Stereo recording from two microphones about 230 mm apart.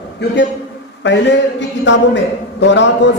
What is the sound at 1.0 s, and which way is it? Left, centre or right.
A man's voice, left.